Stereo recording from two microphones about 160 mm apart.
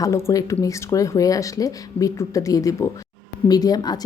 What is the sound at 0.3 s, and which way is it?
A woman's voice, 20° left (ahead or behind).